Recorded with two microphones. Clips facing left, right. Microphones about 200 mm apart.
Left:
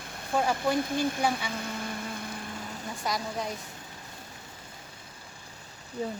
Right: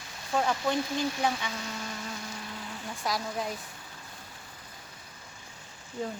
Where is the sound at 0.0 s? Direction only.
55° left (ahead or behind).